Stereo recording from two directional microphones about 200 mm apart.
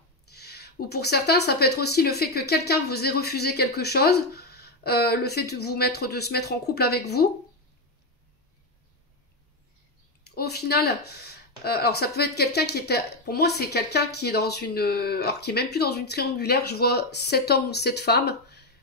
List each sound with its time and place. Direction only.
0.3 s speech: 55° left (ahead or behind)
10.2 s speech: 55° left (ahead or behind)